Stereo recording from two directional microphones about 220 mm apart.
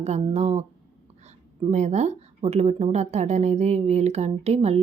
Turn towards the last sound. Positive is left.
turn(degrees=-30)  # may be behind; listen again after turning